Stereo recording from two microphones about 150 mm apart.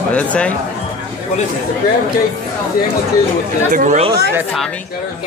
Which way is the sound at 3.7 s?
60° right (ahead or behind).